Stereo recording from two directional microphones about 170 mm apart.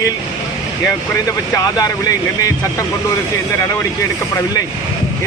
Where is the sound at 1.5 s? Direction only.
20° left (ahead or behind).